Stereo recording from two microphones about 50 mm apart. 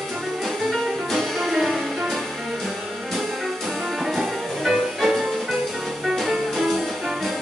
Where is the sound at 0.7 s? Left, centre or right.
Centre.